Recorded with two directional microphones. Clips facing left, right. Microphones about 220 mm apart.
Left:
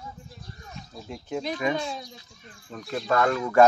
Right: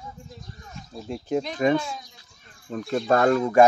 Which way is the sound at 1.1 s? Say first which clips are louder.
Right 6 dB; 35° right (ahead or behind).